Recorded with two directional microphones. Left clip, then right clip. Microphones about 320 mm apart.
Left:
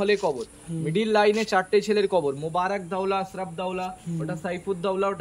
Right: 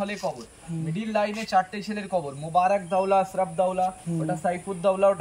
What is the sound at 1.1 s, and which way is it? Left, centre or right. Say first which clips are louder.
Speech: left 3 dB; left.